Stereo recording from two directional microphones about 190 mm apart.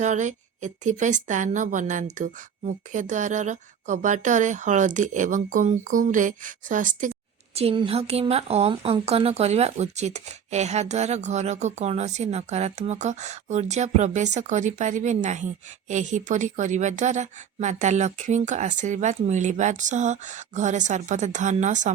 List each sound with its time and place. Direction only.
0.0 s a woman's voice: 40° right (ahead or behind)
7.5 s a woman's voice: 30° right (ahead or behind)